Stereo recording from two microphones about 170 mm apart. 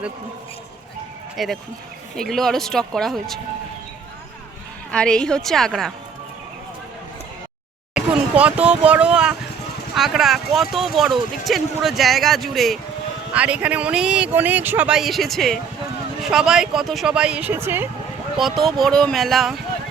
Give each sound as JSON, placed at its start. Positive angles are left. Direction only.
{"t": 1.4, "sound": "speech", "side_deg": 0}
{"t": 4.9, "sound": "speech", "side_deg": 5}
{"t": 7.9, "sound": "speech", "side_deg": -5}
{"t": 18.3, "sound": "speech", "side_deg": 0}